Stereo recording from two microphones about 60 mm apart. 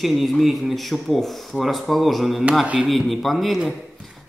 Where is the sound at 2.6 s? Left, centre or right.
Right.